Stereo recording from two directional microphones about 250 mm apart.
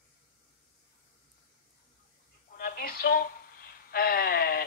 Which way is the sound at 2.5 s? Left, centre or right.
Left.